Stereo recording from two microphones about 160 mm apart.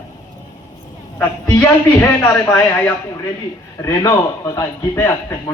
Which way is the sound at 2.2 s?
15° left (ahead or behind).